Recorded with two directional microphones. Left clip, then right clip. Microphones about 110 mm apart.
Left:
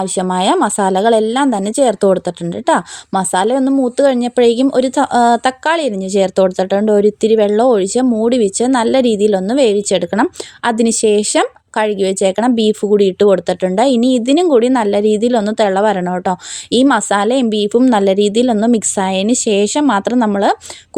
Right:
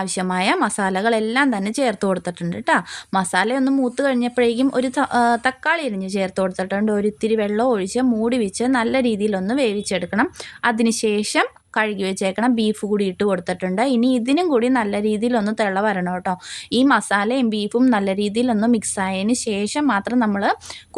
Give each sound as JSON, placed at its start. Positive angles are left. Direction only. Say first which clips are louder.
{"t": 0.0, "sound": "a woman's voice", "louder": "left 6 dB", "side_deg": 40}
{"t": 3.7, "sound": "speech", "louder": "left 6 dB", "side_deg": 20}
{"t": 3.9, "sound": "a woman's voice", "louder": "left 7 dB", "side_deg": 35}
{"t": 8.0, "sound": "speech", "louder": "left 6 dB", "side_deg": 20}
{"t": 8.3, "sound": "a woman's voice", "louder": "left 7 dB", "side_deg": 40}